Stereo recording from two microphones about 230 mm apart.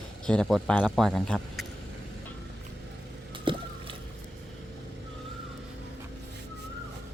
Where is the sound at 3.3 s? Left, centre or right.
Right.